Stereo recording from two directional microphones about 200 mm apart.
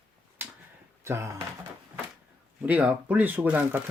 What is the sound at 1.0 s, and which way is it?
Speech, 15° right (ahead or behind).